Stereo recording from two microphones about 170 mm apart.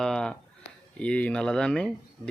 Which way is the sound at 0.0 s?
5° left (ahead or behind).